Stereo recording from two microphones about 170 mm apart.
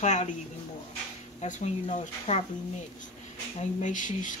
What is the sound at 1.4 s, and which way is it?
Speech, 45° left (ahead or behind).